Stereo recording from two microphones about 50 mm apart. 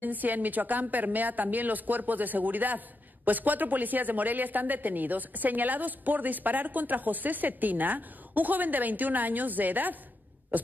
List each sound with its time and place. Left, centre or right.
0.0 s a woman's voice: right
10.5 s beatboxing: right